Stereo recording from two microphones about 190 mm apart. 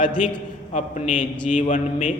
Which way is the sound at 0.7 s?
35° left (ahead or behind).